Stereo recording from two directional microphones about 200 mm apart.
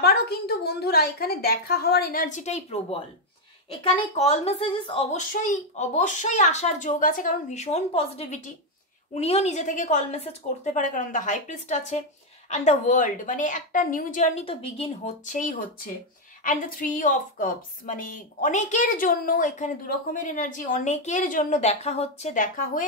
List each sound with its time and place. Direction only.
0.0 s a woman's voice: 50° left (ahead or behind); by 5.2 s 25° left (ahead or behind)
5.3 s a woman's voice: 40° left (ahead or behind)